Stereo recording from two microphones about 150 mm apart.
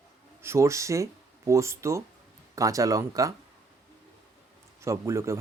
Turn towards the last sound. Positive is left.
turn(degrees=-20)  # may be behind; listen again after turning